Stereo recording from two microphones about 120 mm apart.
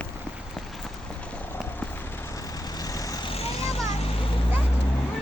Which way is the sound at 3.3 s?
55° left (ahead or behind).